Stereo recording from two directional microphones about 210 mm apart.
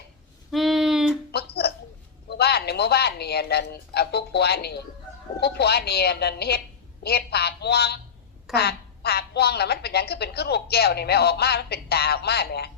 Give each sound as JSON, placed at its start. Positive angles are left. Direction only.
{"t": 0.5, "sound": "a sound", "side_deg": 0}
{"t": 1.3, "sound": "music", "side_deg": 50}
{"t": 2.4, "sound": "a woman's voice", "side_deg": 50}